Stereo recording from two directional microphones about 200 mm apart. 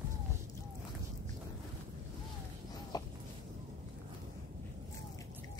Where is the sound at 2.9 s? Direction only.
20° left (ahead or behind).